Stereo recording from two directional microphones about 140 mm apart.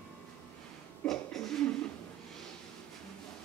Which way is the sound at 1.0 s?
5° left (ahead or behind).